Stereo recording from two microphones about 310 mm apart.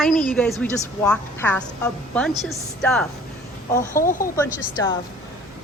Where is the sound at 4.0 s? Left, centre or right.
Left.